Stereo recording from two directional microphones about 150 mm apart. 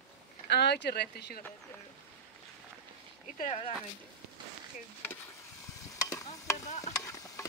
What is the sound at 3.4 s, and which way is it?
Speech, 50° left (ahead or behind).